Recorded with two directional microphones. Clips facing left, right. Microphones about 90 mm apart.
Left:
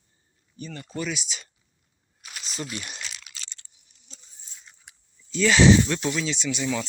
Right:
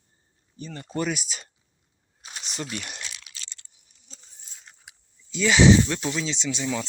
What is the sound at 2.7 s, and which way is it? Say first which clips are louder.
Speech: right 1 dB; 55° right (ahead or behind).